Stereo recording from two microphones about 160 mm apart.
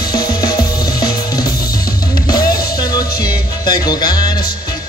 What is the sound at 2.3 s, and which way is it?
Music, 70° left (ahead or behind).